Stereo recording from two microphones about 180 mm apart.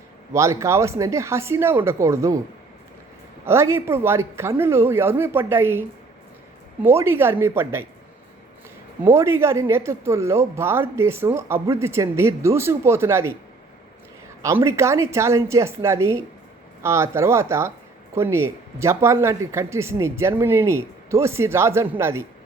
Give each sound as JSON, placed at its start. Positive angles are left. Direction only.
{"t": 0.3, "sound": "speech", "side_deg": -15}
{"t": 3.4, "sound": "speech", "side_deg": -15}
{"t": 6.8, "sound": "speech", "side_deg": -15}
{"t": 9.0, "sound": "speech", "side_deg": -15}
{"t": 14.4, "sound": "speech", "side_deg": -15}